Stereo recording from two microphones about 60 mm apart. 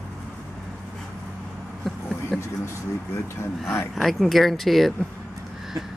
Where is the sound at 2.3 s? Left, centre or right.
Centre.